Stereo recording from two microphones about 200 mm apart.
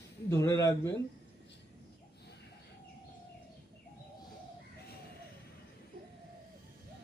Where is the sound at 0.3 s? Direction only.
15° left (ahead or behind).